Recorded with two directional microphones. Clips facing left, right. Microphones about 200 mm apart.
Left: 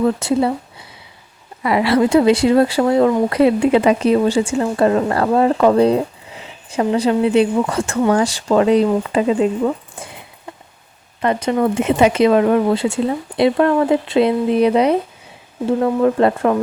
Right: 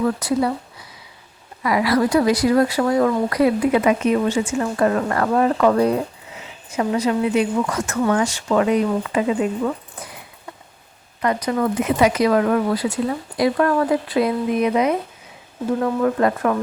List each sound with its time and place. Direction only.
0.0 s a woman's voice: 25° left (ahead or behind)
11.2 s speech: 25° left (ahead or behind)